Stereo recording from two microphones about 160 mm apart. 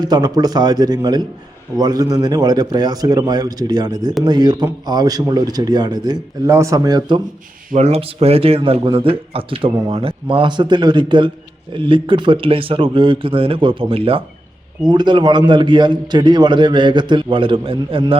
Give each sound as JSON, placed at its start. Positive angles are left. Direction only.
{"t": 0.0, "sound": "a man's voice", "side_deg": -25}
{"t": 7.7, "sound": "a man's voice", "side_deg": -40}